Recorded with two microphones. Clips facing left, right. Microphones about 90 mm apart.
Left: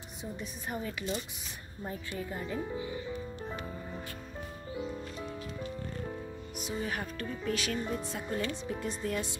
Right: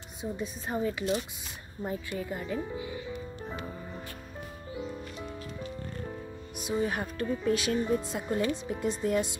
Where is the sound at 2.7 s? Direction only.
10° right (ahead or behind).